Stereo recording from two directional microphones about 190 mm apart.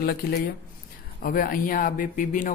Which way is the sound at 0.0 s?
55° left (ahead or behind).